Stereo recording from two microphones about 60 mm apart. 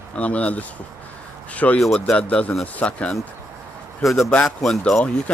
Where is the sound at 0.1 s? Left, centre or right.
Left.